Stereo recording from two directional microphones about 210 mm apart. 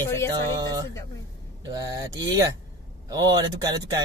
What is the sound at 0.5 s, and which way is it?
Speech, 20° right (ahead or behind).